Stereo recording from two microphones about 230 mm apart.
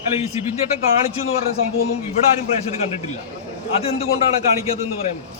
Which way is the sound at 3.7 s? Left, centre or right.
Left.